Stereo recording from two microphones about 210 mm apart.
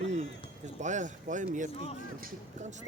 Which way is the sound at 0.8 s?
35° right (ahead or behind).